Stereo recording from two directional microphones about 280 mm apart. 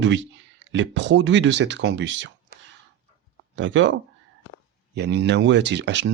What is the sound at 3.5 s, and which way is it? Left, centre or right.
Speech, right.